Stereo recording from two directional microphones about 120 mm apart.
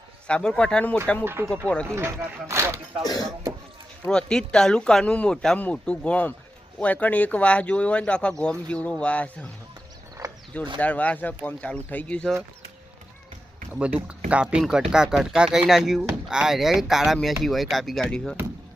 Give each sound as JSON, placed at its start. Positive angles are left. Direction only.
{"t": 0.3, "sound": "speech", "side_deg": 10}
{"t": 1.2, "sound": "speech", "side_deg": -20}
{"t": 1.6, "sound": "speech", "side_deg": 5}
{"t": 1.9, "sound": "speech", "side_deg": -25}
{"t": 3.0, "sound": "speech", "side_deg": 35}
{"t": 4.1, "sound": "speech", "side_deg": 5}
{"t": 10.2, "sound": "mechanisms", "side_deg": -30}
{"t": 10.8, "sound": "speech", "side_deg": 10}
{"t": 13.7, "sound": "speech", "side_deg": -10}